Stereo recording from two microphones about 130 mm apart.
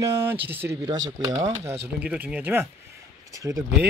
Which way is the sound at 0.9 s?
30° right (ahead or behind).